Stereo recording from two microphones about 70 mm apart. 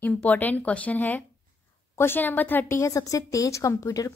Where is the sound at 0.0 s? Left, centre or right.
Left.